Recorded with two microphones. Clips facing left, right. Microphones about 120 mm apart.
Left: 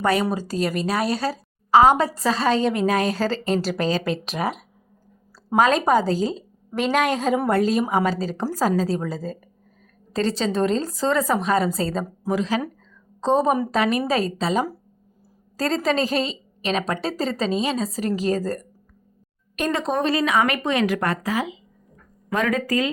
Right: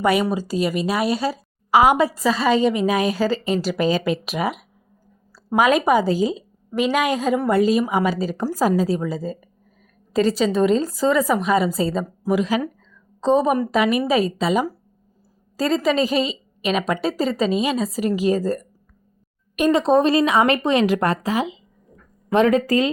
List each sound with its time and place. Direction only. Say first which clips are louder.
0.0 s a woman's voice: right 2 dB; 10° right (ahead or behind); by 22.9 s 25° right (ahead or behind)